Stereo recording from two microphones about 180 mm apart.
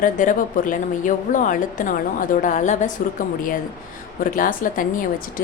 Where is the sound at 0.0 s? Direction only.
50° left (ahead or behind).